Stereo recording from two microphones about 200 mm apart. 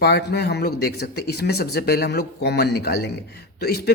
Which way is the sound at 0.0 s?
55° left (ahead or behind).